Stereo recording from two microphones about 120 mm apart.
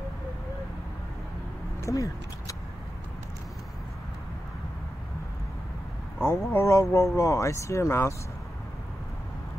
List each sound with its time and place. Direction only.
1.8 s speech: 25° left (ahead or behind)
6.2 s speech: 20° left (ahead or behind)